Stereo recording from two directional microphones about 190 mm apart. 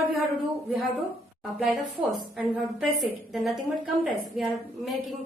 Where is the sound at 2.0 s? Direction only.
Centre (ahead or behind).